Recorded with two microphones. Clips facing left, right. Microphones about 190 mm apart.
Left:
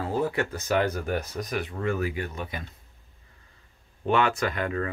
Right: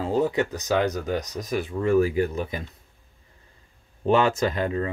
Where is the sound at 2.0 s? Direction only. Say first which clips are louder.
Right 8 dB; 30° right (ahead or behind).